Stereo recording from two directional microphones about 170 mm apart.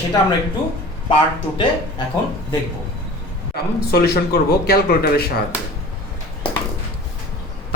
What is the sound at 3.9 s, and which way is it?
Speech, 65° left (ahead or behind).